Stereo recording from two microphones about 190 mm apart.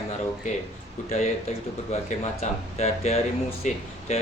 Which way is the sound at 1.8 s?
35° left (ahead or behind).